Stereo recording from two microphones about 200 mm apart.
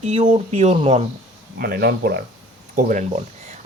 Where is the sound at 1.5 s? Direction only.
50° right (ahead or behind).